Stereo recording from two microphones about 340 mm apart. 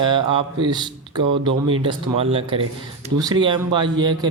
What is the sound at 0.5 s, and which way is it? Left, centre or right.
Speech, centre.